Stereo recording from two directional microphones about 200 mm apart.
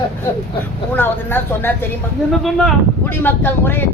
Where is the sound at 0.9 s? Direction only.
10° left (ahead or behind).